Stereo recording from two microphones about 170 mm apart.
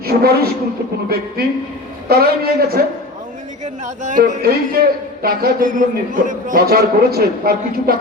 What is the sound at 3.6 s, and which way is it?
Speech, 45° right (ahead or behind).